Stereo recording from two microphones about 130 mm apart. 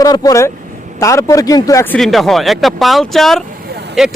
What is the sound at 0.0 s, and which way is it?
A man's voice, 30° left (ahead or behind).